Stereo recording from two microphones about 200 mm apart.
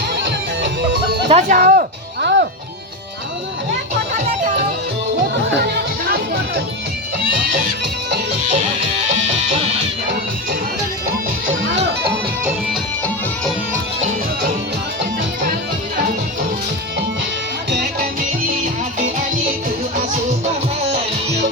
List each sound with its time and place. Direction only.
0.2 s music: 65° right (ahead or behind)
1.3 s music: 40° right (ahead or behind)
4.1 s music: 40° right (ahead or behind)
5.2 s music: 50° right (ahead or behind)
11.7 s music: 60° right (ahead or behind)
17.7 s music: 50° right (ahead or behind)